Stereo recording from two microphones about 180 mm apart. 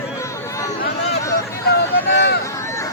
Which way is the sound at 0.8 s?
65° left (ahead or behind).